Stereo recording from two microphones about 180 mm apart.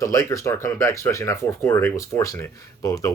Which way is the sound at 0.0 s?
15° left (ahead or behind).